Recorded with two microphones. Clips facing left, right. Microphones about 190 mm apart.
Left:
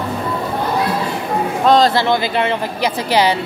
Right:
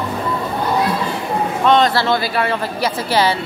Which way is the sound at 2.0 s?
15° left (ahead or behind).